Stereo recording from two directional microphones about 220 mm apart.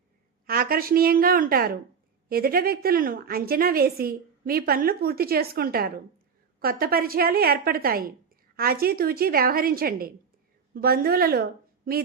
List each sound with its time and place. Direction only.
0.4 s a woman's voice: 40° right (ahead or behind)